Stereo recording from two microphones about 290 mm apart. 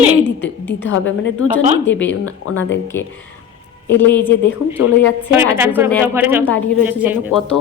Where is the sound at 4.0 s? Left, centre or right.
Centre.